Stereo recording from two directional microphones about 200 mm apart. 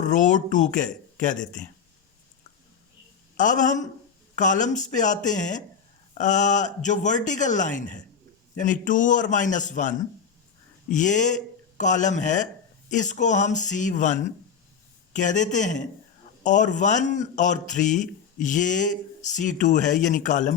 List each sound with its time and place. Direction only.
0.0 s a man's voice: 40° left (ahead or behind)
3.3 s a man's voice: 40° left (ahead or behind)
10.9 s a man's voice: 40° left (ahead or behind)